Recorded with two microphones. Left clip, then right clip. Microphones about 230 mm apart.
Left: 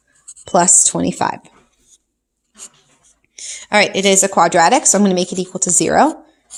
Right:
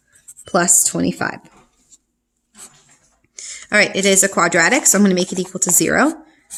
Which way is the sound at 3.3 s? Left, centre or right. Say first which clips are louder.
Left 1 dB; centre.